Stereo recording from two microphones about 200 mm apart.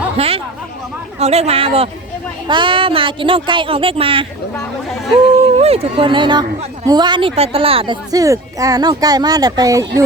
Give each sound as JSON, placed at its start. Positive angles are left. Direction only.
{"t": 0.2, "sound": "a woman's voice", "side_deg": -30}
{"t": 5.4, "sound": "a woman's voice", "side_deg": -30}